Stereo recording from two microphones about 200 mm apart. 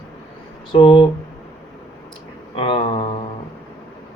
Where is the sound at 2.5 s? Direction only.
25° left (ahead or behind).